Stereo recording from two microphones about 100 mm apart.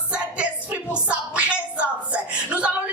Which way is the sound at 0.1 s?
15° right (ahead or behind).